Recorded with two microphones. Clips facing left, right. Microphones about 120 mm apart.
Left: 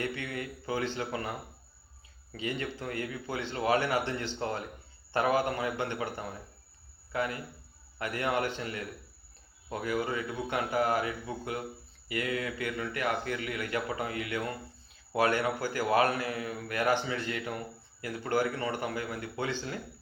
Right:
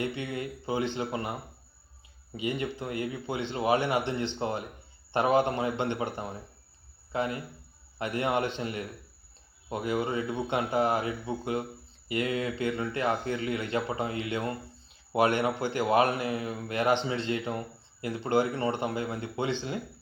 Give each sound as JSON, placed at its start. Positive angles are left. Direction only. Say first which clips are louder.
{"t": 0.0, "sound": "speech", "louder": "right 3 dB", "side_deg": -20}